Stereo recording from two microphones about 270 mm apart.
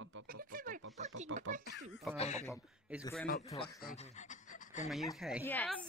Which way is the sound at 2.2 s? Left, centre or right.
Left.